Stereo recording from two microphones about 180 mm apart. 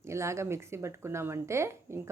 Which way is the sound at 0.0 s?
15° right (ahead or behind).